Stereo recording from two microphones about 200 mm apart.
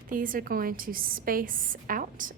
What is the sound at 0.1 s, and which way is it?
A woman's voice, 45° right (ahead or behind).